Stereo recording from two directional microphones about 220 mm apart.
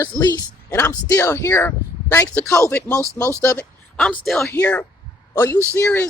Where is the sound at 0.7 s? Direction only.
10° left (ahead or behind).